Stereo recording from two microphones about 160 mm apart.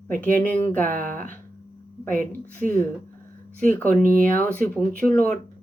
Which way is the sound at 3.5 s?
10° left (ahead or behind).